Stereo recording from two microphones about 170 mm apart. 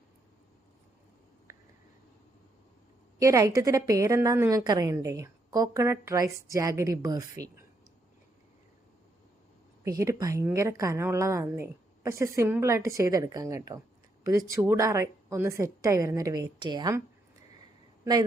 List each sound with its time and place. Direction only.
3.2 s a woman's voice: 20° right (ahead or behind)
9.8 s a woman's voice: 20° right (ahead or behind)